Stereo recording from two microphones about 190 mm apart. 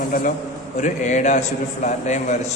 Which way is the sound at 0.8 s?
40° left (ahead or behind).